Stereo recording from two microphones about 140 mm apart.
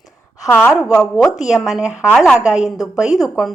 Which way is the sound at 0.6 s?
15° left (ahead or behind).